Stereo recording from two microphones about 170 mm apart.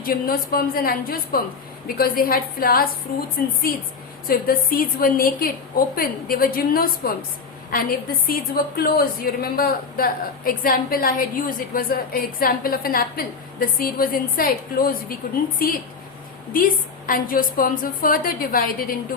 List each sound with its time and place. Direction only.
0.0 s a woman's voice: 60° left (ahead or behind)